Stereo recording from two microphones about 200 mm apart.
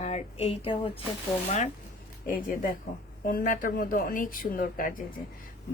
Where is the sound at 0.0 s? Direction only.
30° left (ahead or behind).